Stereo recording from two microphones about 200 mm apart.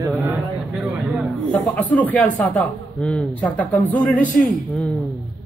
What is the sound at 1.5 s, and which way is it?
A man's voice, 10° left (ahead or behind).